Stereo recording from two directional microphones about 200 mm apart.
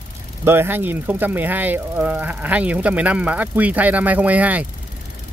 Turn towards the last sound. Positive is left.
turn(degrees=-5)  # may be behind; listen again after turning